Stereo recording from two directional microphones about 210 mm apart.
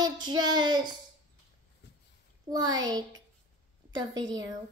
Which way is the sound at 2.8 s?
20° right (ahead or behind).